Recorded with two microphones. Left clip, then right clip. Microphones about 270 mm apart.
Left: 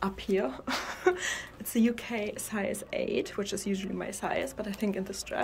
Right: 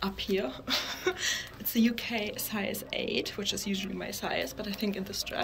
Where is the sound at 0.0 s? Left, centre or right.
Centre.